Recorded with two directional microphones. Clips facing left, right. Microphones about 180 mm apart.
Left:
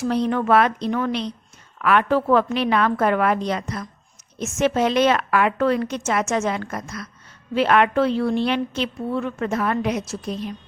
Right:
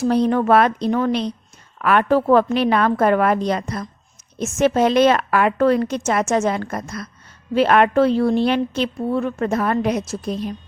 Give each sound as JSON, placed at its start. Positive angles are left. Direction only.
{"t": 0.0, "sound": "a woman's voice", "side_deg": -40}